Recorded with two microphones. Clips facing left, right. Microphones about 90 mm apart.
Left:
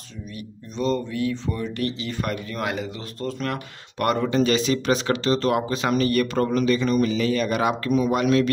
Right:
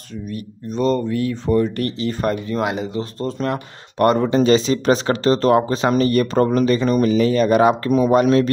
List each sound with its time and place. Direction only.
0.7 s speech: 45° right (ahead or behind)
2.5 s speech: 20° right (ahead or behind)